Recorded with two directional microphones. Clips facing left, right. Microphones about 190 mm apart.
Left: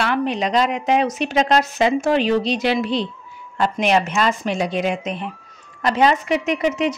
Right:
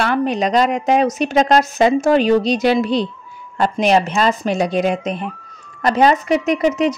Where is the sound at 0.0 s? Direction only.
45° right (ahead or behind).